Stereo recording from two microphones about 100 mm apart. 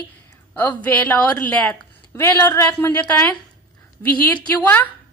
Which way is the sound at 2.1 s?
30° left (ahead or behind).